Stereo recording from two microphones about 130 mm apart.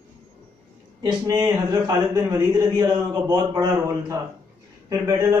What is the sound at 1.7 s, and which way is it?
Speech, 30° right (ahead or behind).